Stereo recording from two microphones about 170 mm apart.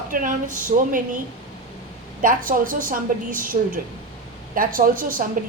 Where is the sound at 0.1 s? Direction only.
50° right (ahead or behind).